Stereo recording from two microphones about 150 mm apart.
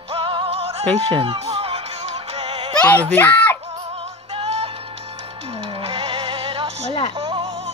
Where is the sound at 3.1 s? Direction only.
10° left (ahead or behind).